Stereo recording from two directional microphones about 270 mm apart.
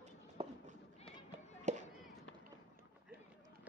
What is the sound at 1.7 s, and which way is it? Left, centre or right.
Chop, right.